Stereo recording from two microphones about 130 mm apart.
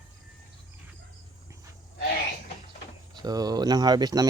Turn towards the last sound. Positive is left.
turn(degrees=-30)  # may be behind; listen again after turning